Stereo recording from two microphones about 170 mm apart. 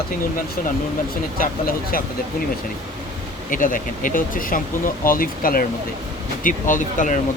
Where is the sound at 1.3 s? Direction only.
55° left (ahead or behind).